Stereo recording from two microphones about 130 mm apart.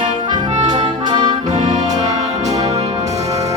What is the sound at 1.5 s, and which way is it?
Music, 65° right (ahead or behind).